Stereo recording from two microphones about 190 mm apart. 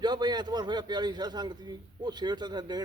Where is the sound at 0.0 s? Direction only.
20° right (ahead or behind).